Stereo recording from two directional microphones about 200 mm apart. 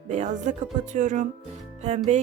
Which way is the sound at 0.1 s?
35° right (ahead or behind).